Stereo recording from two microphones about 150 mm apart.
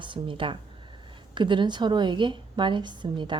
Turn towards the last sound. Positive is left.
turn(degrees=-30)  # may be behind; listen again after turning